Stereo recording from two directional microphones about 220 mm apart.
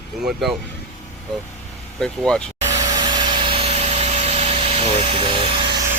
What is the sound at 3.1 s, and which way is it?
Vacuum cleaner, 20° right (ahead or behind).